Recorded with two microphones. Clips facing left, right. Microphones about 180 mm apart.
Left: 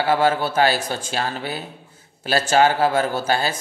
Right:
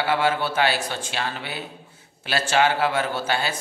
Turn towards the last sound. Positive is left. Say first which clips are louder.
# left 4 dB
turn(degrees=40)  # may be behind; listen again after turning